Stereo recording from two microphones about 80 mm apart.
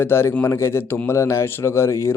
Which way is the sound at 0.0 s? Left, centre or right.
Left.